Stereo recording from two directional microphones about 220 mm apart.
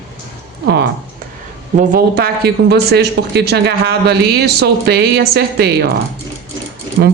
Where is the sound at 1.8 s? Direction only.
40° right (ahead or behind).